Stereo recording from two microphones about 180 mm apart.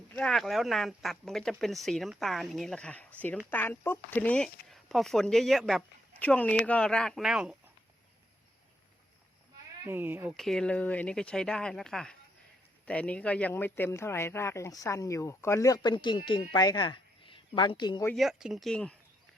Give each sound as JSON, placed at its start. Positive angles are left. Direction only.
{"t": 0.2, "sound": "speech", "side_deg": 0}
{"t": 9.8, "sound": "speech", "side_deg": -10}
{"t": 10.3, "sound": "speech", "side_deg": 0}
{"t": 18.0, "sound": "speech", "side_deg": 0}